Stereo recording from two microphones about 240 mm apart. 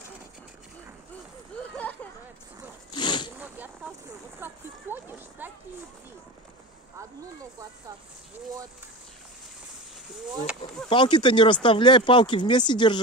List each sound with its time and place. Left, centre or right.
2.9 s zipper: centre
3.3 s a sound: centre
10.9 s speech: centre